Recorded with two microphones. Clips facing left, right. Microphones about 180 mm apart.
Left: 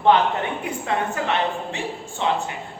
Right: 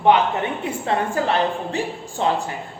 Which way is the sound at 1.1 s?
35° right (ahead or behind).